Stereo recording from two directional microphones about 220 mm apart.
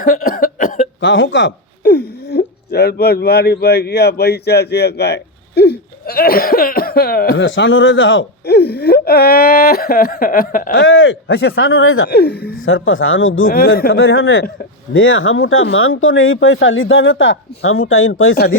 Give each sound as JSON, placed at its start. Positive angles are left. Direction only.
{"t": 0.0, "sound": "cough", "side_deg": 40}
{"t": 1.0, "sound": "speech", "side_deg": 55}
{"t": 10.8, "sound": "speech", "side_deg": 60}
{"t": 11.5, "sound": "speech", "side_deg": 65}
{"t": 12.0, "sound": "speech", "side_deg": 45}
{"t": 12.6, "sound": "speech", "side_deg": 65}